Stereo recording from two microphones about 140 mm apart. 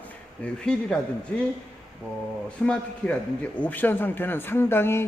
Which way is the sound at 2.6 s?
5° left (ahead or behind).